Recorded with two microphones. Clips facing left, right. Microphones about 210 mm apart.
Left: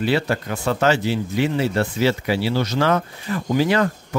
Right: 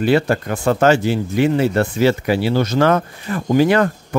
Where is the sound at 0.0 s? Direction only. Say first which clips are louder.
Right 5 dB; 50° right (ahead or behind).